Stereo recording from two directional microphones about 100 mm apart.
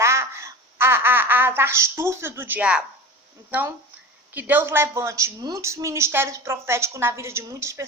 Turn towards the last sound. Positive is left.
turn(degrees=-25)  # may be behind; listen again after turning